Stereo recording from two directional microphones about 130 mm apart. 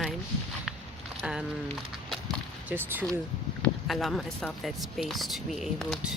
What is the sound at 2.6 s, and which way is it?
Speech, 15° right (ahead or behind).